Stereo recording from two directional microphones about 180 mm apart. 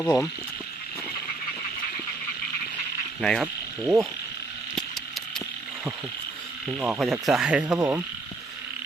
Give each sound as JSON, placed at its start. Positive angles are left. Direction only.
{"t": 0.0, "sound": "speech", "side_deg": 5}
{"t": 3.2, "sound": "speech", "side_deg": 5}
{"t": 3.4, "sound": "speech", "side_deg": -10}
{"t": 6.7, "sound": "speech", "side_deg": -5}
{"t": 7.8, "sound": "frog", "side_deg": -15}